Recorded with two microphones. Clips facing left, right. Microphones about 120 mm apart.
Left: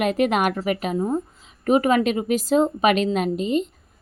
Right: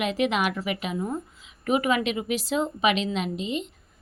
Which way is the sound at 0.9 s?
25° left (ahead or behind).